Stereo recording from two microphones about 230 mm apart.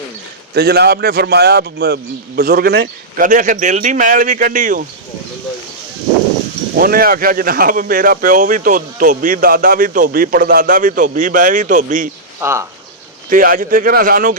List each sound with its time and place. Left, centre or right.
0.5 s speech: right
6.7 s speech: right
12.4 s speech: centre
13.3 s speech: right